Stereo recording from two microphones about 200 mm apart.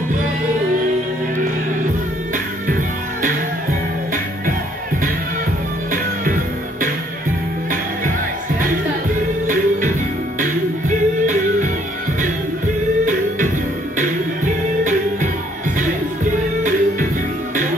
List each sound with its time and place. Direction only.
2.3 s music: 40° right (ahead or behind)
6.2 s music: 40° right (ahead or behind)
9.5 s music: 40° right (ahead or behind)
13.0 s music: 40° right (ahead or behind)